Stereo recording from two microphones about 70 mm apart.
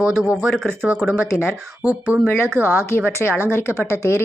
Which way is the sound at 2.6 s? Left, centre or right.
Right.